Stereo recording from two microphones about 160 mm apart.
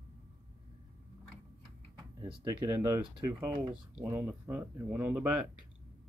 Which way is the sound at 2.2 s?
30° right (ahead or behind).